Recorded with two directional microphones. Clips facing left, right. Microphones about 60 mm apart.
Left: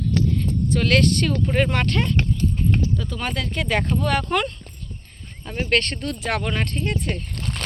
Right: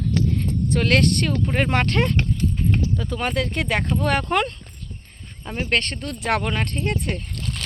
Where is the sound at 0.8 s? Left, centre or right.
Right.